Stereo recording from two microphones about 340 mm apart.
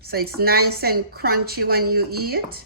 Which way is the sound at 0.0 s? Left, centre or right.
Right.